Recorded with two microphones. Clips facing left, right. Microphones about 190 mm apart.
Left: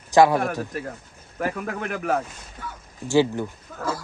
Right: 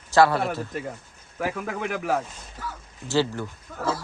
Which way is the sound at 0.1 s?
15° left (ahead or behind).